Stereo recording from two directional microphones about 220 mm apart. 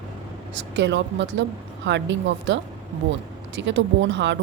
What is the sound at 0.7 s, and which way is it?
Speech, 55° right (ahead or behind).